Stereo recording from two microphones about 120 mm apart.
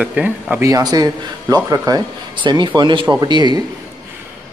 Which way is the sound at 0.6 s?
30° right (ahead or behind).